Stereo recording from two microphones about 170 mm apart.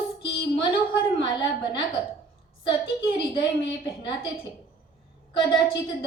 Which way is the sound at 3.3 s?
30° left (ahead or behind).